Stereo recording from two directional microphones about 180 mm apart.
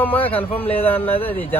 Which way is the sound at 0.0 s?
10° left (ahead or behind).